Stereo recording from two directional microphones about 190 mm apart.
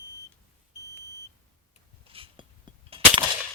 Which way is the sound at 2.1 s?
30° right (ahead or behind).